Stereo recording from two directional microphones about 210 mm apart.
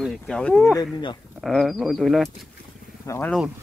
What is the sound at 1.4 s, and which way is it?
Speech, centre (ahead or behind).